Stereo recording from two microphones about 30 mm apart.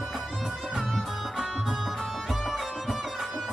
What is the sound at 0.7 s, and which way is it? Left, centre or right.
Music, centre.